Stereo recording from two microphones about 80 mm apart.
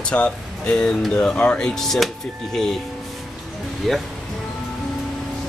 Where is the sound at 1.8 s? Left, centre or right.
Centre.